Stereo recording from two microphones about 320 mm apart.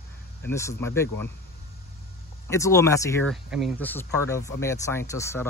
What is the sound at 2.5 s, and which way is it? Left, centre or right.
Speech, centre.